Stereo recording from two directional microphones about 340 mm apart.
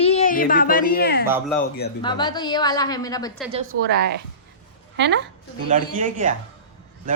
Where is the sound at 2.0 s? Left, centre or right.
Centre.